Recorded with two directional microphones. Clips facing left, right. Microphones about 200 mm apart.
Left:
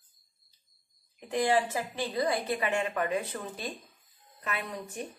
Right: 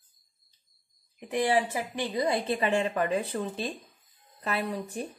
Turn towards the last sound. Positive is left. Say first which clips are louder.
# right 5 dB
turn(degrees=-30)  # may be behind; listen again after turning